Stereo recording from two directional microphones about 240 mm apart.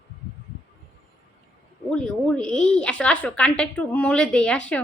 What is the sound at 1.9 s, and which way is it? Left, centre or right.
A woman's voice, centre.